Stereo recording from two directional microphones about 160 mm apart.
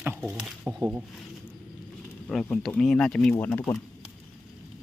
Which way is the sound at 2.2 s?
5° left (ahead or behind).